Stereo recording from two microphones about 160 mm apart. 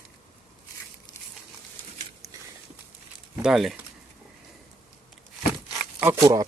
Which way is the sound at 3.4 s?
Centre (ahead or behind).